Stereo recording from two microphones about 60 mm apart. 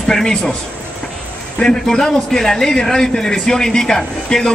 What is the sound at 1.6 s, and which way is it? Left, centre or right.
A man's voice, centre.